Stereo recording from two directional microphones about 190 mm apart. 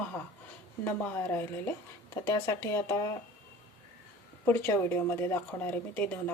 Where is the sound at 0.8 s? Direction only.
10° left (ahead or behind).